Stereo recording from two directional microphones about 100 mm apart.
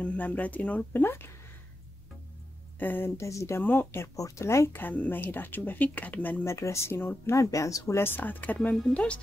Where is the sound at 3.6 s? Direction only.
20° left (ahead or behind).